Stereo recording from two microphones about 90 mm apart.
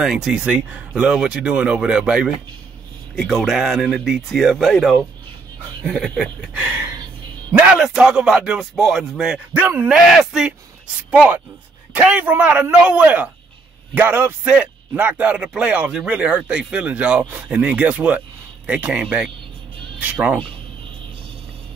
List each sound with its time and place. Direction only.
0.0 s speech: 5° right (ahead or behind)
6.6 s a man's voice: 25° right (ahead or behind)
7.7 s speech: 5° right (ahead or behind)
9.6 s a man's voice: 20° right (ahead or behind)
9.8 s speech: 5° right (ahead or behind)
11.1 s a man's voice: 15° right (ahead or behind)